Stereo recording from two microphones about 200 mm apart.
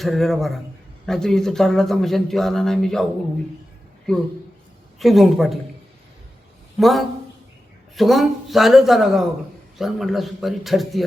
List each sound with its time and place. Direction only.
0.0 s speech: centre (ahead or behind)
4.9 s speech: centre (ahead or behind)
6.7 s a man's voice: centre (ahead or behind)